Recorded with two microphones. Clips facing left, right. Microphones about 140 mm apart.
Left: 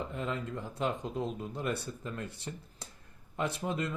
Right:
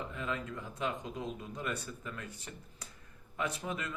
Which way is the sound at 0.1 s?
30° left (ahead or behind).